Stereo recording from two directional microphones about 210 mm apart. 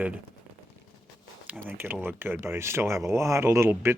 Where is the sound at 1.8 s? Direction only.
10° right (ahead or behind).